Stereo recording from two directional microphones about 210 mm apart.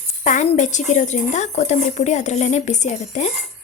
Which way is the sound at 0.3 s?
35° left (ahead or behind).